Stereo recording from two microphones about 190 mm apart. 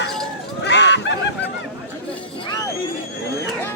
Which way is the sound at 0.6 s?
65° left (ahead or behind).